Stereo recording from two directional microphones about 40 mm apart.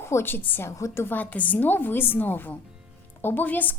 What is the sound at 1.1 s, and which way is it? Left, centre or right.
A woman's voice, left.